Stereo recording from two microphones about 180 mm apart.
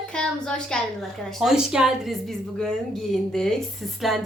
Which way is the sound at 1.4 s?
5° right (ahead or behind).